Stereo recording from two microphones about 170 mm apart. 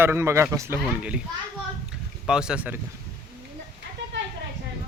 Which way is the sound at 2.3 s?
5° right (ahead or behind).